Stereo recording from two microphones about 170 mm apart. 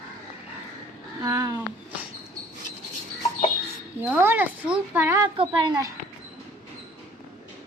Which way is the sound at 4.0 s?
10° right (ahead or behind).